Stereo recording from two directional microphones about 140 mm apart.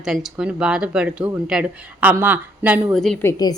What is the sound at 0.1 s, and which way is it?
Speech, 5° right (ahead or behind).